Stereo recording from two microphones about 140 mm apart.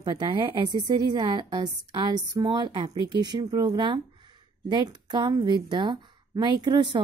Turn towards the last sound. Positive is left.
turn(degrees=-35)  # may be behind; listen again after turning